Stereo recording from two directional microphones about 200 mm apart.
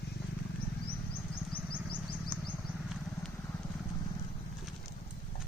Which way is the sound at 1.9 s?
25° left (ahead or behind).